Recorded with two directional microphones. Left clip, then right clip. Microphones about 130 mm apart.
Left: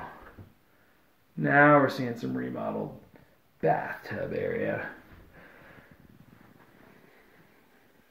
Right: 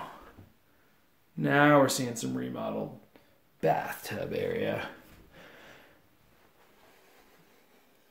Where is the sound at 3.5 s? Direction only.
20° right (ahead or behind).